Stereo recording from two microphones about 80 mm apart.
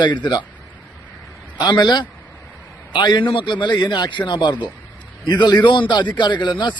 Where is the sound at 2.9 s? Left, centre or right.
Left.